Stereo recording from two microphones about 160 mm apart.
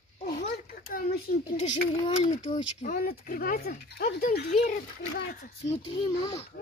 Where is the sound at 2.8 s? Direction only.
65° left (ahead or behind); by 4.2 s 90° left.